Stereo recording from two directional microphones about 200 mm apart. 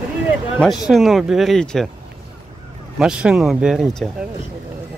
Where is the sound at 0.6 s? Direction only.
Centre (ahead or behind).